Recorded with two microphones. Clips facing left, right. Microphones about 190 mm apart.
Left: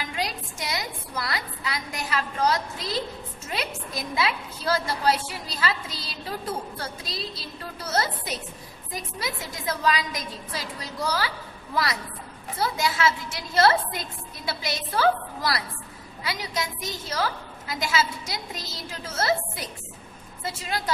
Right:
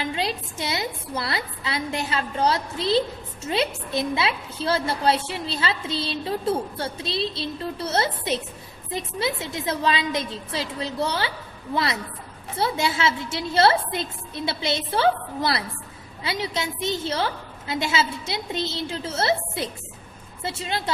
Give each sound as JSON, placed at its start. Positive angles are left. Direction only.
{"t": 0.0, "sound": "a woman's voice", "side_deg": -25}